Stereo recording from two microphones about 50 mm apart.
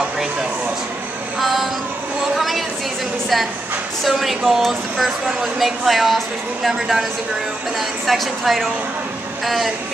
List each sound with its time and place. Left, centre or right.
1.4 s female singing: centre
2.3 s a sound: centre
4.0 s a woman's voice: centre
8.1 s a woman's voice: centre